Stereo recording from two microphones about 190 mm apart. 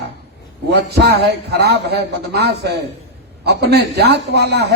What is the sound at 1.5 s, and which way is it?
A man's voice, 60° right (ahead or behind).